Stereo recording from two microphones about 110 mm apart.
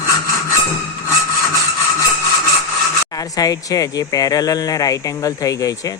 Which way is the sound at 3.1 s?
35° left (ahead or behind).